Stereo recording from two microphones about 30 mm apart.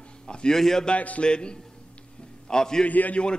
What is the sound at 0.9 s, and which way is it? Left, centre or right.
Speech, left.